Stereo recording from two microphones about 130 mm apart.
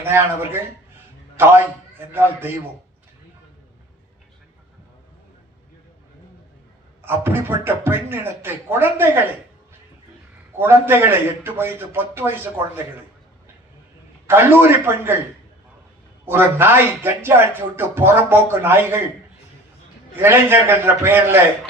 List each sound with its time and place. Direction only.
0.0 s a man's voice: 20° right (ahead or behind)
7.0 s speech: 15° right (ahead or behind)
10.6 s speech: 20° right (ahead or behind)
14.3 s speech: 15° right (ahead or behind)
16.2 s speech: 15° right (ahead or behind)
20.1 s speech: 20° right (ahead or behind)